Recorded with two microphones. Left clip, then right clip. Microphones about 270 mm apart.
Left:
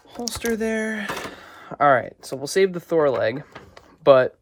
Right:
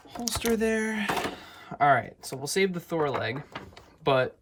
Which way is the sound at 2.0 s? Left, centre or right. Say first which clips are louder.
Left 5 dB; centre.